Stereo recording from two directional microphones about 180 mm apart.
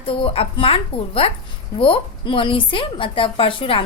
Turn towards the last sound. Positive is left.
turn(degrees=30)  # may be behind; listen again after turning